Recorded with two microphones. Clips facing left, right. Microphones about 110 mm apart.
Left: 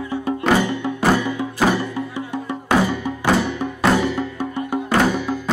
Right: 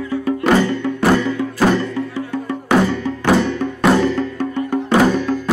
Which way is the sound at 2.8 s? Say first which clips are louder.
Right 3 dB; 15° left (ahead or behind).